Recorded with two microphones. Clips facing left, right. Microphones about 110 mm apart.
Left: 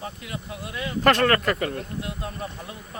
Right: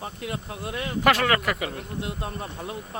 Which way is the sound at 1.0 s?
5° right (ahead or behind).